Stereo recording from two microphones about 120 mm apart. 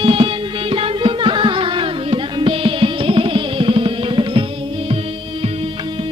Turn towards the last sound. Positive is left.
turn(degrees=-45)  # may be behind; listen again after turning